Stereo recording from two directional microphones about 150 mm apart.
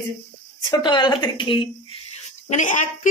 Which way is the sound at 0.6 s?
30° left (ahead or behind).